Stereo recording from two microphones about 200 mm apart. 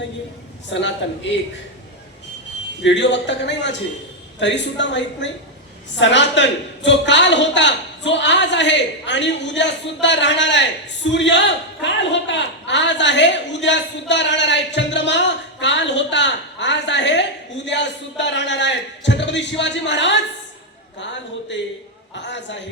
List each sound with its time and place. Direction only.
0.7 s a man's voice: 65° left (ahead or behind)
2.8 s a man's voice: 65° left (ahead or behind)